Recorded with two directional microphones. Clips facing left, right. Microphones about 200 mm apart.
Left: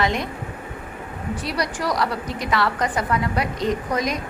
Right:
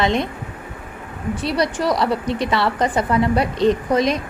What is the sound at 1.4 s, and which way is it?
A woman's voice, 25° right (ahead or behind).